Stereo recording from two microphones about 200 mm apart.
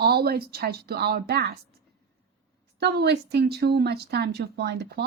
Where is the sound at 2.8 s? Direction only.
55° right (ahead or behind).